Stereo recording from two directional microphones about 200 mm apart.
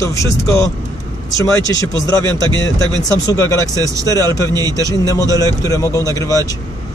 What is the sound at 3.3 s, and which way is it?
Speech, 15° left (ahead or behind).